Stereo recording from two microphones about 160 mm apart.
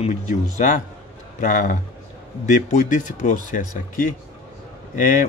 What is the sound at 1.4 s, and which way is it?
Speech, 55° left (ahead or behind).